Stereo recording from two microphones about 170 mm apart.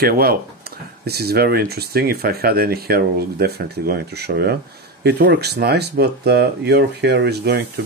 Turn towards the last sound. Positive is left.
turn(degrees=-75)  # may be behind; listen again after turning